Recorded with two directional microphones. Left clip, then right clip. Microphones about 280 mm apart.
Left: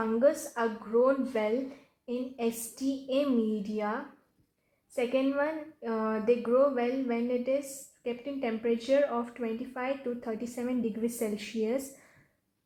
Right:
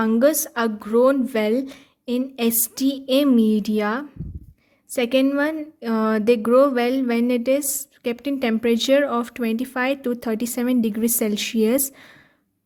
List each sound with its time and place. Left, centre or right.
0.0 s speech: right